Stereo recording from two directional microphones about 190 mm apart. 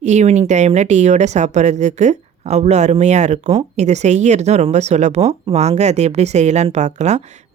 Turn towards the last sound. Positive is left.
turn(degrees=-35)  # may be behind; listen again after turning